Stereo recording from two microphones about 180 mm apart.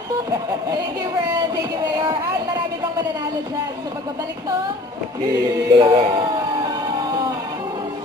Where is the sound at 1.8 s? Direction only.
20° right (ahead or behind).